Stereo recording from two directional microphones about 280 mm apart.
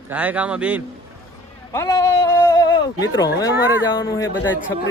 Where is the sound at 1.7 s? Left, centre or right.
Centre.